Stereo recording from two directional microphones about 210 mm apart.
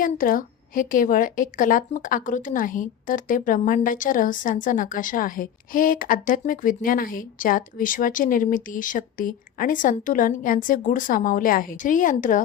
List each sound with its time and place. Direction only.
0.0 s a woman's voice: 40° left (ahead or behind)